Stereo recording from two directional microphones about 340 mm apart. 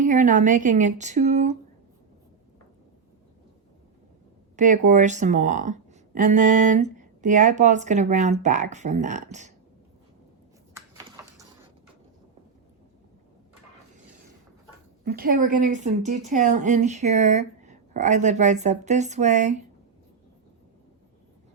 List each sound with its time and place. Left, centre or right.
0.0 s a woman's voice: right
4.5 s speech: right
10.8 s a sound: centre
15.0 s speech: right